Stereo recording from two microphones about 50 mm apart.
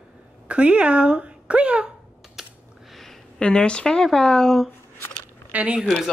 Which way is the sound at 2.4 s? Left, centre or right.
Centre.